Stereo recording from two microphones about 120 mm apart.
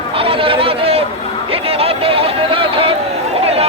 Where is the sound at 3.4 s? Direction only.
60° right (ahead or behind).